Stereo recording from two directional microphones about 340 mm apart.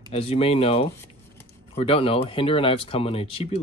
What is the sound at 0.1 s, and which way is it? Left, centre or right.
Speech, centre.